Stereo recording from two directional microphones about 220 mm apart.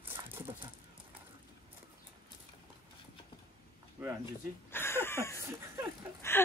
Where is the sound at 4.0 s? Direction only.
5° right (ahead or behind).